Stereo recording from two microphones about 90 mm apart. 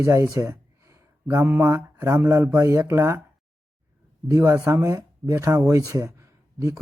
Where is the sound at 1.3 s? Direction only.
25° right (ahead or behind).